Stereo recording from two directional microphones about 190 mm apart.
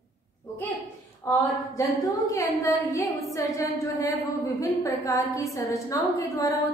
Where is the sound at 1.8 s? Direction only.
15° left (ahead or behind).